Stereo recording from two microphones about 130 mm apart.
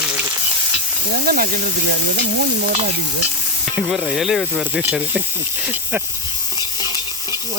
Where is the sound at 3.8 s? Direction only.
10° right (ahead or behind).